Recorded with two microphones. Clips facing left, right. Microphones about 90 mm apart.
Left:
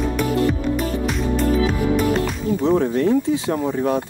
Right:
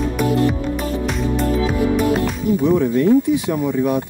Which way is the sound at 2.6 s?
25° left (ahead or behind).